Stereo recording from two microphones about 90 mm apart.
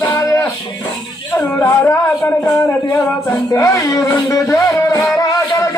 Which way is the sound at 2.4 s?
20° left (ahead or behind).